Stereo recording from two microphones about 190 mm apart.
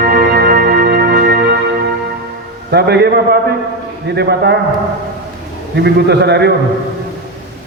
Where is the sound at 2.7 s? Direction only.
60° right (ahead or behind).